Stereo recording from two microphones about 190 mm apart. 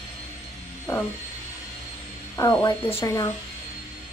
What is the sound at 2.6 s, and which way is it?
Speech, 20° left (ahead or behind).